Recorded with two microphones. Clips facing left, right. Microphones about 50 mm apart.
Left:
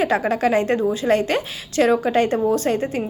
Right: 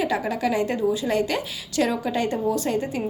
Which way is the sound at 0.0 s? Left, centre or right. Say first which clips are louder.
Left 5 dB; left.